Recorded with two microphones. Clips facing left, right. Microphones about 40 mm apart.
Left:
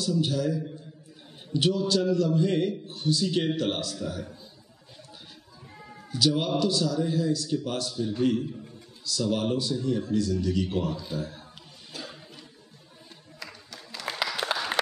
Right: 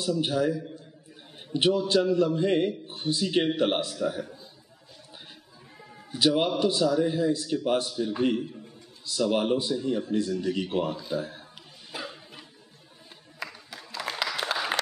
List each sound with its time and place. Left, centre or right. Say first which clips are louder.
0.2 s a man's voice: right 1 dB; right
6.1 s a man's voice: right 1 dB; right
11.9 s a sound: right 3 dB; right
13.4 s music: right 4 dB; centre
14.2 s applause: left 1 dB; centre